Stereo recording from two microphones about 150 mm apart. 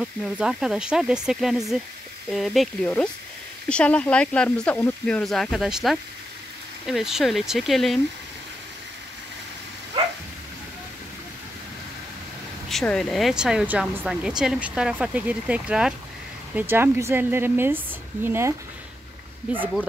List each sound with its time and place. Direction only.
0.0 s speech: 5° right (ahead or behind)
9.9 s dog: 30° right (ahead or behind)
12.6 s speech: 5° left (ahead or behind); by 18.5 s 15° right (ahead or behind)